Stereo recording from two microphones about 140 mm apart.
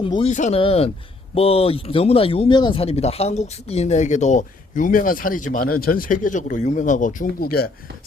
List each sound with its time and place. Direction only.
0.0 s speech: 35° left (ahead or behind)
0.3 s speech: 55° left (ahead or behind)
0.6 s speech: 45° left (ahead or behind); by 7.7 s 90° left